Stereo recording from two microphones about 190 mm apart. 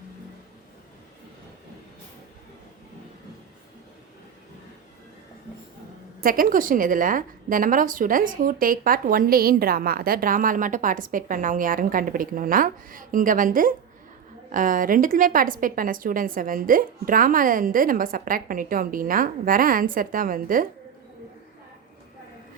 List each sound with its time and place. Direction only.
6.2 s a woman's voice: 50° right (ahead or behind)